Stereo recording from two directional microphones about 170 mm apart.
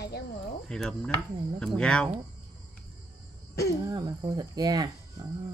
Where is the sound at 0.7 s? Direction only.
5° left (ahead or behind).